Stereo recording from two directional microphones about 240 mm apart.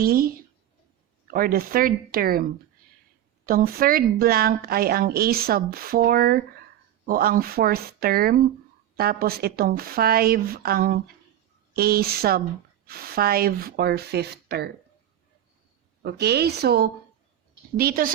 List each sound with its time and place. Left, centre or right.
0.0 s a woman's voice: right
16.0 s a woman's voice: right